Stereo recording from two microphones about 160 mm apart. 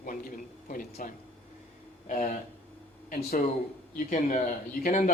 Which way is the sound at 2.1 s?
50° left (ahead or behind).